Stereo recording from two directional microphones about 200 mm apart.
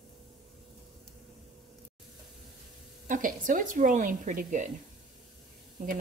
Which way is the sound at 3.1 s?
40° right (ahead or behind).